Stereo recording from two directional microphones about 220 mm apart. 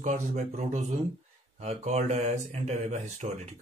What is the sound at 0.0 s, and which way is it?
Speech, 35° right (ahead or behind).